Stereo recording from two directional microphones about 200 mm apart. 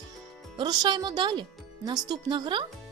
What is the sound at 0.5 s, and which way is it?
Speech, 20° right (ahead or behind).